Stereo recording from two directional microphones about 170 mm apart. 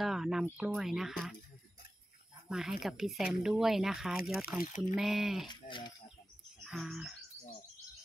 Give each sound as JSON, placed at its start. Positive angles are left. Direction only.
{"t": 0.0, "sound": "speech", "side_deg": 0}
{"t": 2.5, "sound": "speech", "side_deg": 0}
{"t": 5.5, "sound": "speech", "side_deg": 25}
{"t": 6.6, "sound": "bird", "side_deg": 0}